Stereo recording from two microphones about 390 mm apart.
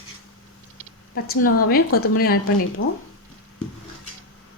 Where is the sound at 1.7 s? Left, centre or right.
Left.